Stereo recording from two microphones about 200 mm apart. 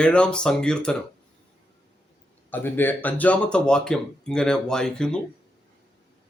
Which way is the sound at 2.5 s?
10° left (ahead or behind).